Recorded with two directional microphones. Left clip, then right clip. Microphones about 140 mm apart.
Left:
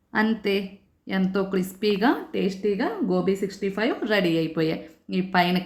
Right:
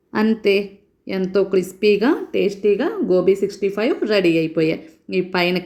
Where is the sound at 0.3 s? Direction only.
20° right (ahead or behind).